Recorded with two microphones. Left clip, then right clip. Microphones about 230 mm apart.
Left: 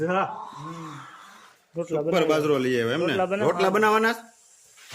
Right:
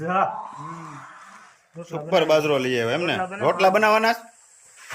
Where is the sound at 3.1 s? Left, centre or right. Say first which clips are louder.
Left 3 dB; left.